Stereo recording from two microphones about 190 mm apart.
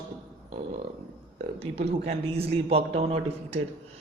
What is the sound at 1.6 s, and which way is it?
A man's voice, 35° right (ahead or behind).